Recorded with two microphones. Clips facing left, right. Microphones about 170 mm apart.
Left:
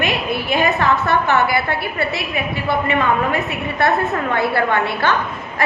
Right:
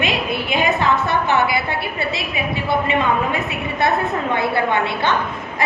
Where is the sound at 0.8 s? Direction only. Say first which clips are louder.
Left 1 dB; 15° right (ahead or behind).